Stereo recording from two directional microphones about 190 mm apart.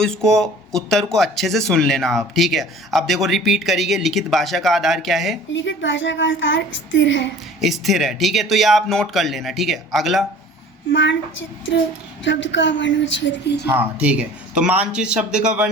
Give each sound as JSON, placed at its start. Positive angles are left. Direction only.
{"t": 0.0, "sound": "speech", "side_deg": 5}
{"t": 5.5, "sound": "speech", "side_deg": 75}
{"t": 7.6, "sound": "speech", "side_deg": 0}
{"t": 10.9, "sound": "speech", "side_deg": 70}
{"t": 13.7, "sound": "speech", "side_deg": -10}